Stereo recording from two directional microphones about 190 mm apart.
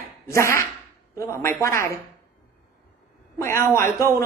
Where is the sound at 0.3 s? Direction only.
15° left (ahead or behind).